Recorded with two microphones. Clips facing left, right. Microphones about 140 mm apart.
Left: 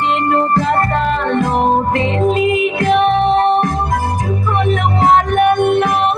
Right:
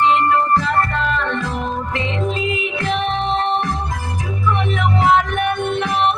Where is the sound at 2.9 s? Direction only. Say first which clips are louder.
Left 8 dB; 55° left (ahead or behind).